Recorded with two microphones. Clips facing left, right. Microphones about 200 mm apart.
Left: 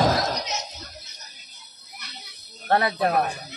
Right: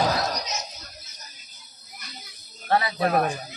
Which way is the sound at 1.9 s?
70° left (ahead or behind).